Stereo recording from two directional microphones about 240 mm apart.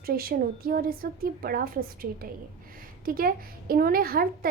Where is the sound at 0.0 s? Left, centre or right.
Right.